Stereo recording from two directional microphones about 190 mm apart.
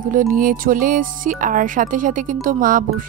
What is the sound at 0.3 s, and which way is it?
Speech, 45° right (ahead or behind).